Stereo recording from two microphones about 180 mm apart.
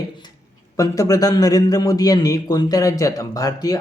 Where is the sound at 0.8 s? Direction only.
20° left (ahead or behind).